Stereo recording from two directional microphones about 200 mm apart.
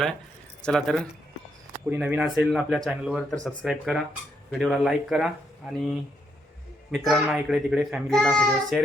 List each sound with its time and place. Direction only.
0.6 s a child's voice: 5° left (ahead or behind)